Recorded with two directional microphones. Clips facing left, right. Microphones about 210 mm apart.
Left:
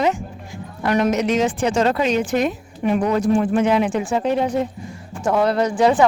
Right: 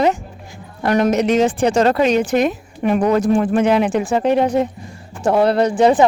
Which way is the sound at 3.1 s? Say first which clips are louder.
Right 2 dB; 85° right.